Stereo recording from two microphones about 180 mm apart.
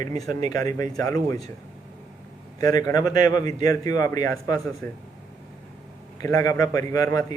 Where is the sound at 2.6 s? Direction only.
20° left (ahead or behind).